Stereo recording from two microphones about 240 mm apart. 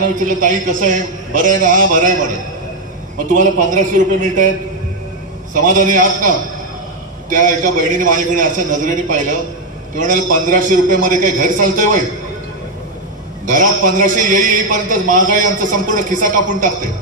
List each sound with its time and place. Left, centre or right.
0.0 s a man's voice: right
3.3 s a man's voice: right
5.5 s a man's voice: right
13.5 s a man's voice: right